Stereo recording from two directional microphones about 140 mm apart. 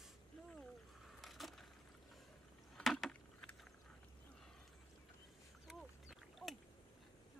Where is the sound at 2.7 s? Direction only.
5° left (ahead or behind).